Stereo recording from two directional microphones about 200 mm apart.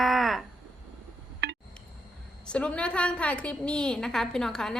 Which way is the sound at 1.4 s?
55° right (ahead or behind).